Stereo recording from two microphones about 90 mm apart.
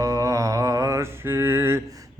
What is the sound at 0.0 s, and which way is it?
Mantra, 40° right (ahead or behind).